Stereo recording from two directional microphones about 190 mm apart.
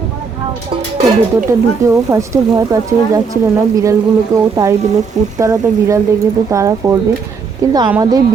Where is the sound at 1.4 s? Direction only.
15° right (ahead or behind).